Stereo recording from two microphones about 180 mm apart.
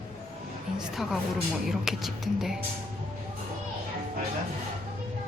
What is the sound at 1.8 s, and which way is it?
Speech, centre (ahead or behind).